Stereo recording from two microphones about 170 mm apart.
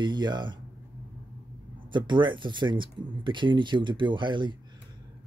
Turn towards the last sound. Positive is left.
turn(degrees=-25)  # may be behind; listen again after turning